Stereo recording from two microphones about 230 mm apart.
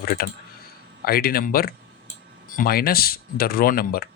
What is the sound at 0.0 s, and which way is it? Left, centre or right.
Speech, left.